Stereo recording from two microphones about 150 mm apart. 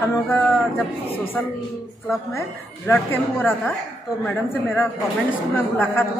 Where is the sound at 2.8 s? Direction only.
15° left (ahead or behind).